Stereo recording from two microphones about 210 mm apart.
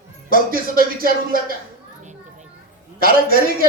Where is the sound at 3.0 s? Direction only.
45° right (ahead or behind).